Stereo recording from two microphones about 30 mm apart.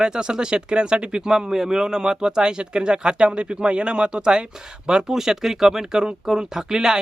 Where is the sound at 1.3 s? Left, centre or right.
Centre.